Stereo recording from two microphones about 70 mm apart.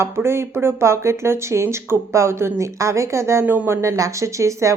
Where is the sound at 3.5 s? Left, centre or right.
Right.